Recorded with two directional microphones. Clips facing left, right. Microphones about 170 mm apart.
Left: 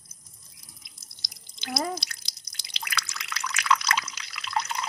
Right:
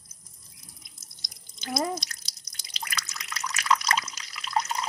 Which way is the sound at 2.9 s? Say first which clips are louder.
Left 4 dB; 40° right (ahead or behind).